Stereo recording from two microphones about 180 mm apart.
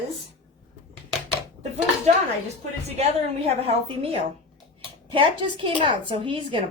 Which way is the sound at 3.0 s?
35° right (ahead or behind).